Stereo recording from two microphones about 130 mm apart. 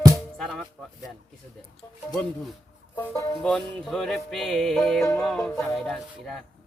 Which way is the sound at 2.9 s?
20° left (ahead or behind).